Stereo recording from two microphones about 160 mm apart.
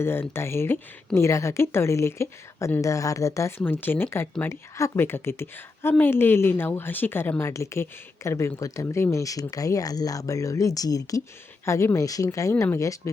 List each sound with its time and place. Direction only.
0.0 s speech: 15° left (ahead or behind)